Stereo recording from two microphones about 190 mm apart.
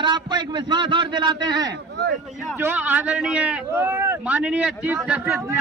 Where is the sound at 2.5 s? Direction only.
10° right (ahead or behind).